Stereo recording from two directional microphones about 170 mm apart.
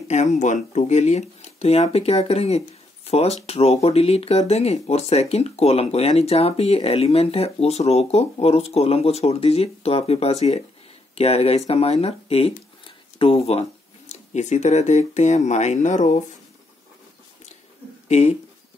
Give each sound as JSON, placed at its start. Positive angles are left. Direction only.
{"t": 0.1, "sound": "speech", "side_deg": 45}
{"t": 18.0, "sound": "speech", "side_deg": 40}